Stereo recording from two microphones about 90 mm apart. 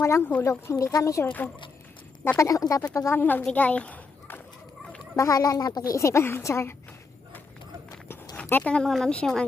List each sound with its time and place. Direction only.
0.0 s a woman's voice: 35° left (ahead or behind)
2.4 s a woman's voice: 40° left (ahead or behind); by 3.4 s 20° left (ahead or behind)
3.5 s a sound: 15° left (ahead or behind)
5.1 s a woman's voice: 40° left (ahead or behind)
8.4 s a sound: 20° left (ahead or behind)
8.7 s speech: 5° left (ahead or behind)